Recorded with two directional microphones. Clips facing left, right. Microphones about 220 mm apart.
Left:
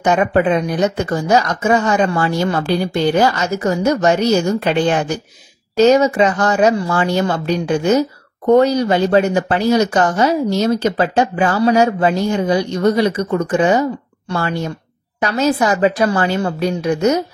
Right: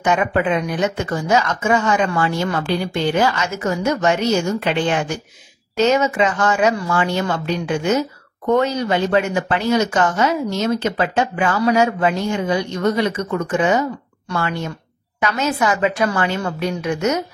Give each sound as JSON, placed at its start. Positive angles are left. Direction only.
{"t": 0.0, "sound": "speech", "side_deg": 40}